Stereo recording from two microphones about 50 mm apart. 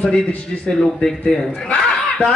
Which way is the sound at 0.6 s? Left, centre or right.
Centre.